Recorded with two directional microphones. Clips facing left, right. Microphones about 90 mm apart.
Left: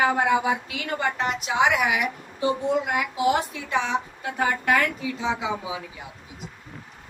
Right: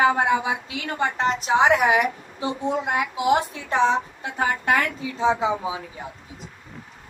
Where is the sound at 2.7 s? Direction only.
25° right (ahead or behind).